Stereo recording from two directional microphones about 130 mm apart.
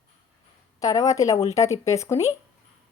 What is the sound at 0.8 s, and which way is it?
A woman's voice, 25° left (ahead or behind).